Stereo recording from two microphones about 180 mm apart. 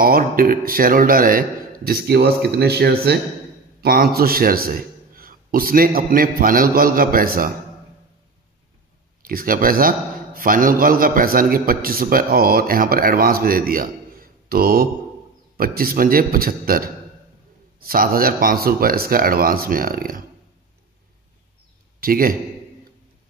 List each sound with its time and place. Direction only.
0.0 s a man's voice: 55° right (ahead or behind)
9.2 s a man's voice: 55° right (ahead or behind)
22.0 s a man's voice: 50° right (ahead or behind)